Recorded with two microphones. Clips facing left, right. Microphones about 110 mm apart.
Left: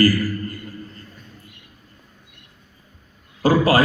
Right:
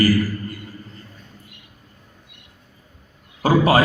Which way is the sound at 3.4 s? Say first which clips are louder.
Even; 20° right (ahead or behind).